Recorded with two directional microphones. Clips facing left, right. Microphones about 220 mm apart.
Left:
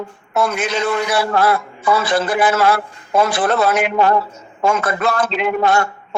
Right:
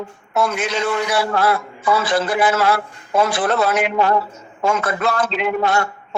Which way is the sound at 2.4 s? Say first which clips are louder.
Left 2 dB; 55° left (ahead or behind).